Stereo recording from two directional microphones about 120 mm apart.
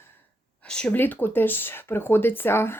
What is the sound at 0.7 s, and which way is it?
Speech, 10° left (ahead or behind).